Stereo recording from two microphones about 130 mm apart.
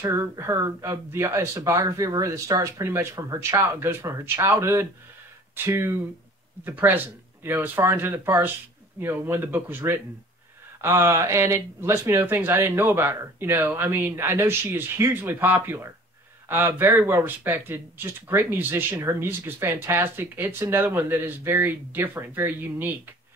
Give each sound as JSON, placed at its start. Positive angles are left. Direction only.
{"t": 0.0, "sound": "speech", "side_deg": -20}